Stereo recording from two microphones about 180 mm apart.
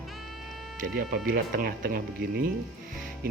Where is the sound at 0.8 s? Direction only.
55° right (ahead or behind).